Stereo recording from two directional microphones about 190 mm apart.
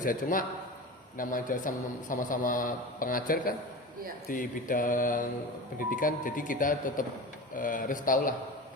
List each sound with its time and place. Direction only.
0.0 s a man's voice: 45° left (ahead or behind)